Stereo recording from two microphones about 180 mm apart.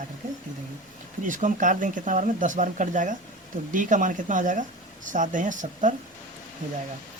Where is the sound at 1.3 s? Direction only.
45° right (ahead or behind).